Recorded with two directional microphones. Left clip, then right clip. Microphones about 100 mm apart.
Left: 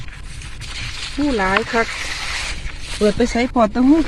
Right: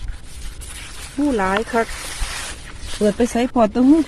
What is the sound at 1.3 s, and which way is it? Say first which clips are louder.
Speech: left 1 dB; 15° right (ahead or behind).